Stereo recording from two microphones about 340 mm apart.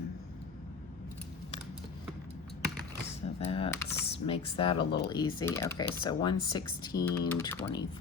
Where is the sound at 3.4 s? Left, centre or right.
Centre.